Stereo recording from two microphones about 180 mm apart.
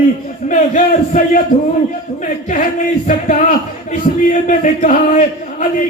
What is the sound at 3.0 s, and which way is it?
A man's voice, 45° left (ahead or behind).